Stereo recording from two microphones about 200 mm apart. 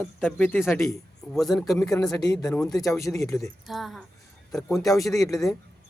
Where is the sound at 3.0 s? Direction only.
15° left (ahead or behind).